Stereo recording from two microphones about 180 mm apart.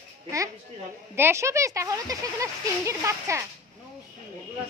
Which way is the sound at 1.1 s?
15° right (ahead or behind).